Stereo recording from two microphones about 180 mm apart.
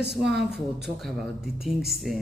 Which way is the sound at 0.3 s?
70° right (ahead or behind).